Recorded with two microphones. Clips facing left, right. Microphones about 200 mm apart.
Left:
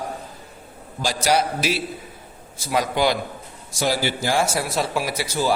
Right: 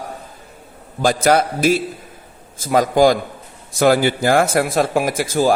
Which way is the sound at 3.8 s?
55° right (ahead or behind).